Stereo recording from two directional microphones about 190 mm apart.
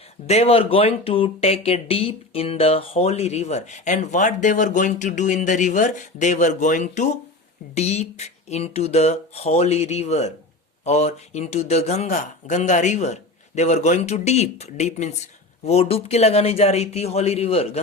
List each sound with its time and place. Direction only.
0.3 s speech: 30° left (ahead or behind)